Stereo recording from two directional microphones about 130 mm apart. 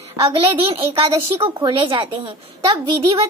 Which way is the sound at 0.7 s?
45° right (ahead or behind).